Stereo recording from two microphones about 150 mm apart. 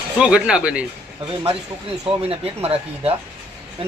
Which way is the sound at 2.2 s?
40° right (ahead or behind).